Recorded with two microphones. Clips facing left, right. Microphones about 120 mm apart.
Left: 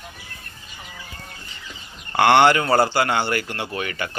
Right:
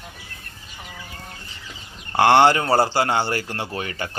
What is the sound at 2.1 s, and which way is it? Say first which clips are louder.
A man's voice: even; 30° right (ahead or behind).